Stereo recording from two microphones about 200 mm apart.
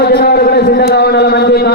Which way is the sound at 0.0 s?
50° left (ahead or behind).